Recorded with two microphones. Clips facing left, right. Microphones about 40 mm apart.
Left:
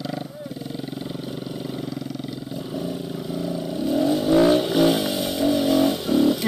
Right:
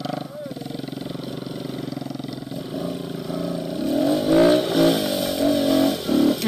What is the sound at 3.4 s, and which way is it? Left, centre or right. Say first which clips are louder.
Vehicle: even; centre.